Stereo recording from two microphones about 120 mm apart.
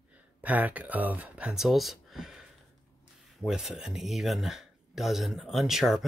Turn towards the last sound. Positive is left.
turn(degrees=0)  # may be behind; listen again after turning